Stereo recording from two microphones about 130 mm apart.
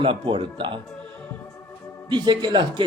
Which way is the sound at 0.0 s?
40° right (ahead or behind).